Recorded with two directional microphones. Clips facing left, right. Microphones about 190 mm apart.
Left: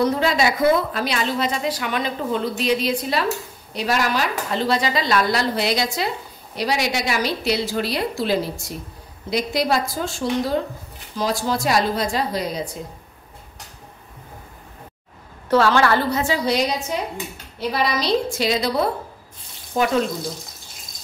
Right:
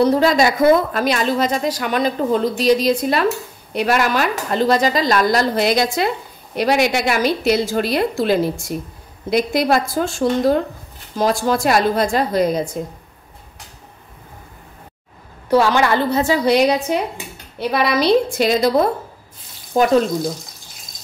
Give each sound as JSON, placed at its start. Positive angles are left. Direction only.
{"t": 0.0, "sound": "a woman's voice", "side_deg": -40}
{"t": 15.5, "sound": "a woman's voice", "side_deg": -15}
{"t": 16.4, "sound": "a woman's voice", "side_deg": -60}